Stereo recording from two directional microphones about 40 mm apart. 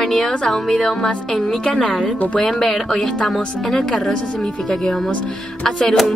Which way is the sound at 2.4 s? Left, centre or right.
Centre.